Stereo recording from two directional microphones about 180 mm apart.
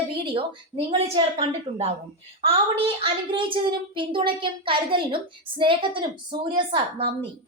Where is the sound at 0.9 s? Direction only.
35° right (ahead or behind).